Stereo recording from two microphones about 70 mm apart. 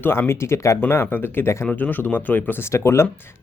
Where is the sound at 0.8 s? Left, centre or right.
Left.